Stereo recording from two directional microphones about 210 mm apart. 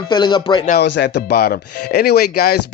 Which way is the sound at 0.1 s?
20° left (ahead or behind).